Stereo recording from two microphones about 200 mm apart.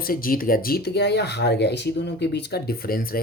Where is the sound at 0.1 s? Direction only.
45° left (ahead or behind).